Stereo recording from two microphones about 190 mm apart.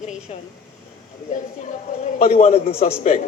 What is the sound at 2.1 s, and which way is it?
Speech, 35° left (ahead or behind).